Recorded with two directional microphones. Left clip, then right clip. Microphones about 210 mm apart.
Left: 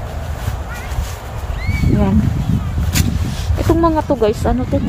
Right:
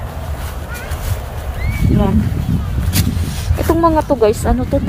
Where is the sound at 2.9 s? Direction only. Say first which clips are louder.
Even; 15° right (ahead or behind).